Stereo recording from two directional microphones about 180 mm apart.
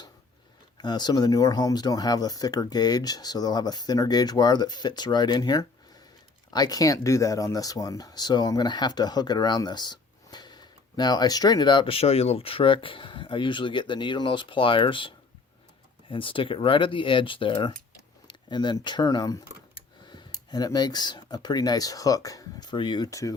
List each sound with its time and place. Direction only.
0.8 s speech: 25° left (ahead or behind)